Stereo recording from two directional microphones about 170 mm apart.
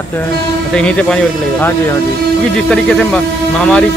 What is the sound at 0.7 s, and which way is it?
Speech, 5° left (ahead or behind).